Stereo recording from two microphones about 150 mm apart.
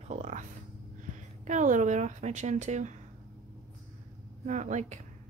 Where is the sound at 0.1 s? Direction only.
55° right (ahead or behind).